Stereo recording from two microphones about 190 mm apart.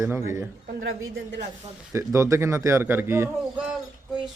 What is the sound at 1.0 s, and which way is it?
Speech, 80° right.